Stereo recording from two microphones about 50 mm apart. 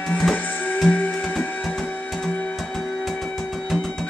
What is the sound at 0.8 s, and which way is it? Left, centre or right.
Music, left.